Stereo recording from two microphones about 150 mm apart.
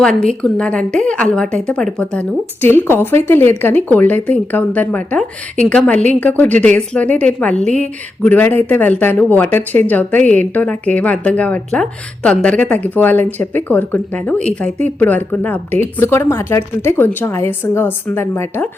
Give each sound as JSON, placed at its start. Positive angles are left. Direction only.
{"t": 0.0, "sound": "a woman's voice", "side_deg": 5}